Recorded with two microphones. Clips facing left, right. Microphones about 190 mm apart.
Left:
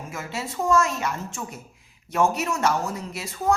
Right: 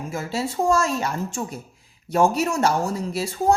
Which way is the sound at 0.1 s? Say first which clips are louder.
Right 6 dB; 30° right (ahead or behind).